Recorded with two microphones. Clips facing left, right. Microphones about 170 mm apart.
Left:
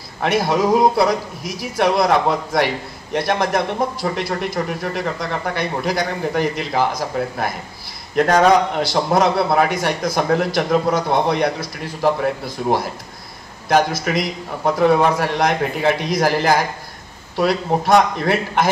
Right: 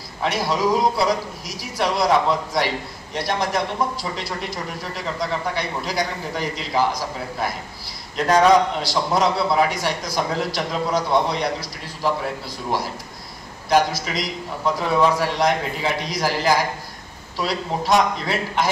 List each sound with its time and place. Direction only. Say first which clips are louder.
0.2 s a man's voice: left 4 dB; 55° left (ahead or behind)